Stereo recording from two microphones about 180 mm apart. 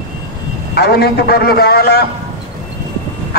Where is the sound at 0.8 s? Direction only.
65° left (ahead or behind).